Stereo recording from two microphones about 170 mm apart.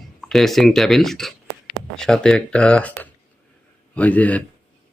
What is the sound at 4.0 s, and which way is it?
Speech, 10° left (ahead or behind).